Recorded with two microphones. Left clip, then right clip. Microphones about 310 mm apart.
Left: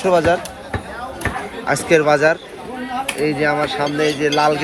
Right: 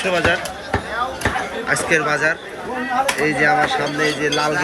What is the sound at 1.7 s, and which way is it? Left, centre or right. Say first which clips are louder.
A man's voice: left 4 dB; centre.